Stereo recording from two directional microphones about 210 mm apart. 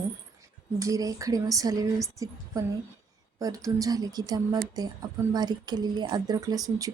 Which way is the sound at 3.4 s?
15° right (ahead or behind).